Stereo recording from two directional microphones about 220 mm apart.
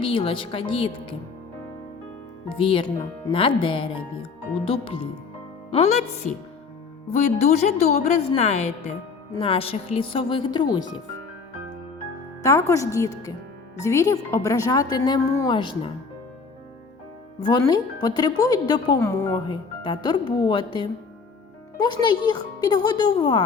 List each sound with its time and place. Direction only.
0.0 s speech: 25° left (ahead or behind)
2.5 s a woman's voice: 25° left (ahead or behind)
12.4 s speech: 15° left (ahead or behind)
17.4 s speech: 20° left (ahead or behind)
22.3 s speech: 20° left (ahead or behind)